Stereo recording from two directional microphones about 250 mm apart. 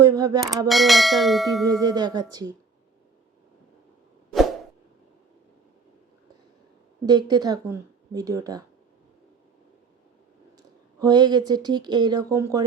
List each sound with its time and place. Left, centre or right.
0.0 s a sound: centre
0.7 s bell: centre
1.7 s speech: centre
7.0 s speech: centre
10.6 s speech: centre